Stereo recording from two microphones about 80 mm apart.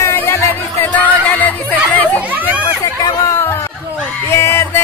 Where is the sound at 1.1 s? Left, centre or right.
Left.